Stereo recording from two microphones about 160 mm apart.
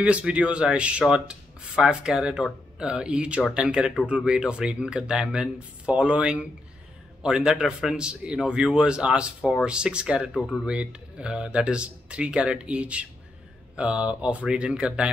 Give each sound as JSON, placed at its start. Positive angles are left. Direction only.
{"t": 0.0, "sound": "speech", "side_deg": -10}